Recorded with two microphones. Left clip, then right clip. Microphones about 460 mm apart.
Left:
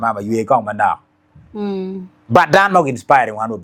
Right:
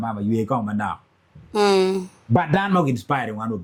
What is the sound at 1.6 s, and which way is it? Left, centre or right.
Speech, centre.